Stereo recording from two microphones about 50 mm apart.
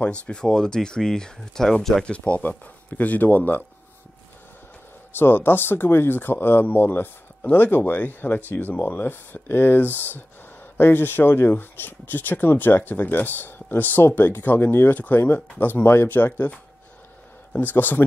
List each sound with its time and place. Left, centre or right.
0.0 s speech: left; by 2.0 s centre
2.0 s speech: left
5.1 s speech: left
15.0 s speech: left
15.8 s speech: left
16.1 s speech: left